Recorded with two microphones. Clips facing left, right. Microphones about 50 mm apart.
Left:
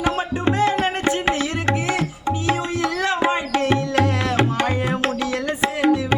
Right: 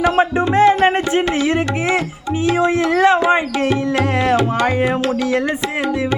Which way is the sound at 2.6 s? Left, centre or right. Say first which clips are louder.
Right 8 dB; right.